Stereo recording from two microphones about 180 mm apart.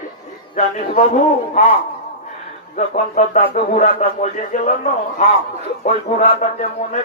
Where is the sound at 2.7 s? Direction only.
40° left (ahead or behind).